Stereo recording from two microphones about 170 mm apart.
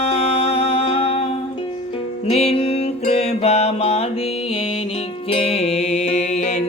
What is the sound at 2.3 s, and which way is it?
Music, 35° left (ahead or behind).